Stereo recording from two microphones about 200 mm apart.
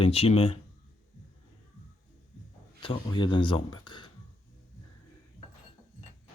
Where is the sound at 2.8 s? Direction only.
25° left (ahead or behind).